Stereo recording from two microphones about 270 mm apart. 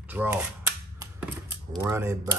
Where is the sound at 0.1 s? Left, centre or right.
Centre.